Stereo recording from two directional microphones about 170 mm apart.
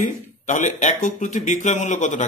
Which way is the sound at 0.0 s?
45° left (ahead or behind).